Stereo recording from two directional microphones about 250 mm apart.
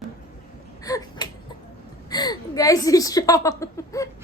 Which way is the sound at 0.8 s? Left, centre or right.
Centre.